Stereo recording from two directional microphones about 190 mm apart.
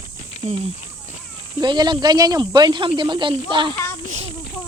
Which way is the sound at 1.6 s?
25° right (ahead or behind).